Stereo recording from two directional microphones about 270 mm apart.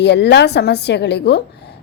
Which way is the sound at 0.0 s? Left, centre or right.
Left.